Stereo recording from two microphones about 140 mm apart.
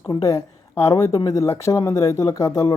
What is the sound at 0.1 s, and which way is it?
A woman's voice, 25° left (ahead or behind).